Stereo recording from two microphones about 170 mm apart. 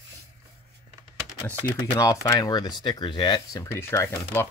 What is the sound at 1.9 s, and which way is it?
Speech, 20° left (ahead or behind).